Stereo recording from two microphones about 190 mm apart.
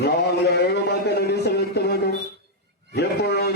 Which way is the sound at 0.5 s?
60° left (ahead or behind).